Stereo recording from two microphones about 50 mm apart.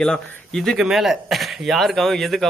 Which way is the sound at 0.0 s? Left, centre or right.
Centre.